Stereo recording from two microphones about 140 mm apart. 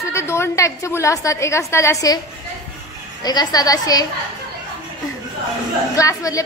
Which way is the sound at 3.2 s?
30° left (ahead or behind).